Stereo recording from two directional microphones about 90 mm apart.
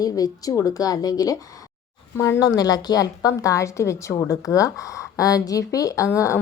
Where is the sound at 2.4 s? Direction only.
45° left (ahead or behind).